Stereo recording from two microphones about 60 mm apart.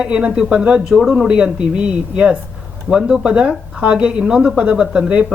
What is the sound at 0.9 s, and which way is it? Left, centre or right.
Speech, centre.